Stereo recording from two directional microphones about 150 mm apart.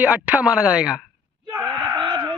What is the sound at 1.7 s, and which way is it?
Whimper, 30° right (ahead or behind).